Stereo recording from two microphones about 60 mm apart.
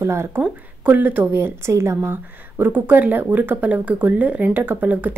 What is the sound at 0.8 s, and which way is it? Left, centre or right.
A woman's voice, right.